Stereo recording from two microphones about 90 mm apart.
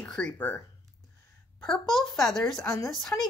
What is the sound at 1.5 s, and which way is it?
A woman's voice, 5° left (ahead or behind).